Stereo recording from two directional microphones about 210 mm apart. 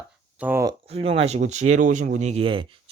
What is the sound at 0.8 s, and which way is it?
Speech, 30° right (ahead or behind).